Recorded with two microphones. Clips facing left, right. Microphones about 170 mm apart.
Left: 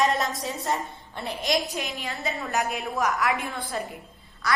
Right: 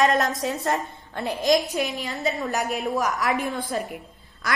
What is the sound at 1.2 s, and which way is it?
Speech, 20° right (ahead or behind).